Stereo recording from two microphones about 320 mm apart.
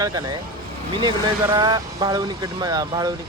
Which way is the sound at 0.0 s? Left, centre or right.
Centre.